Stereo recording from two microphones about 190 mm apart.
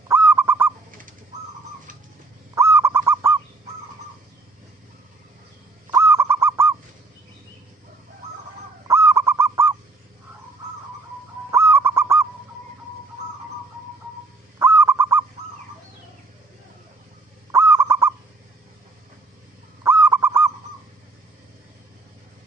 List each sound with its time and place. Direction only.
0.1 s goose: 10° right (ahead or behind)
0.9 s bird: 45° right (ahead or behind)
2.6 s goose: 15° right (ahead or behind)
5.9 s goose: 15° right (ahead or behind)
8.9 s goose: 15° right (ahead or behind)
11.5 s goose: 15° right (ahead or behind)
14.6 s goose: 10° right (ahead or behind)
17.5 s owl: 15° right (ahead or behind)
19.8 s goose: 15° right (ahead or behind)